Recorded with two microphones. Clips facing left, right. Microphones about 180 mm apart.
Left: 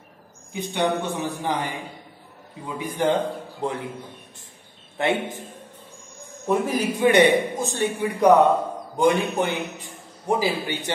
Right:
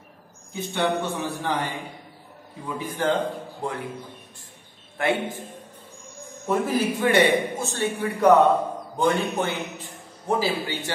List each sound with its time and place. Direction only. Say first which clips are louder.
0.5 s a man's voice: left 1 dB; 15° left (ahead or behind)
4.9 s a man's voice: left 1 dB; 20° left (ahead or behind)
6.4 s a man's voice: left 1 dB; 15° left (ahead or behind)